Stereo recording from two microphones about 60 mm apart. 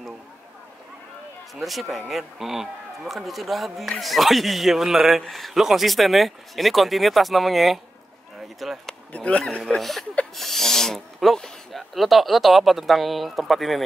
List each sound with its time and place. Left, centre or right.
1.5 s speech: centre
9.1 s speech: left
9.8 s speech: centre